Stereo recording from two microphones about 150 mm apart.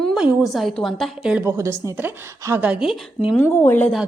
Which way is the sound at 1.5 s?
20° right (ahead or behind).